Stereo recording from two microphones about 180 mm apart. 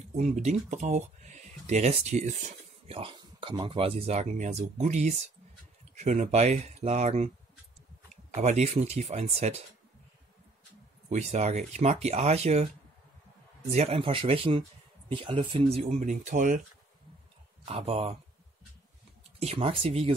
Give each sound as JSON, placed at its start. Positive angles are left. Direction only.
{"t": 0.1, "sound": "speech", "side_deg": -35}
{"t": 8.4, "sound": "speech", "side_deg": -40}
{"t": 11.1, "sound": "speech", "side_deg": -40}
{"t": 17.6, "sound": "speech", "side_deg": -35}
{"t": 19.4, "sound": "speech", "side_deg": -30}